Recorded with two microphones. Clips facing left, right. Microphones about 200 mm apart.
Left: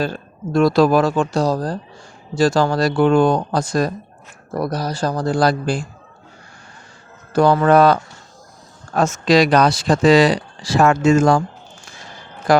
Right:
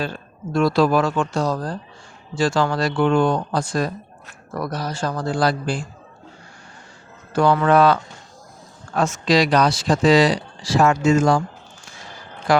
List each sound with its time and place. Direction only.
0.0 s speech: 40° left (ahead or behind)
7.3 s speech: 40° left (ahead or behind)
9.0 s speech: 50° left (ahead or behind)
12.5 s speech: 40° left (ahead or behind)